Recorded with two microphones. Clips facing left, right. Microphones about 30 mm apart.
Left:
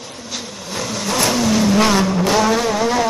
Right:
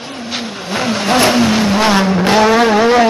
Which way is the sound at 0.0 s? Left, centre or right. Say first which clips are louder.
Right 7 dB; right.